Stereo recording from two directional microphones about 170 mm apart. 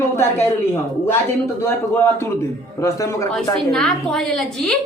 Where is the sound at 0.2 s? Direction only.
15° left (ahead or behind).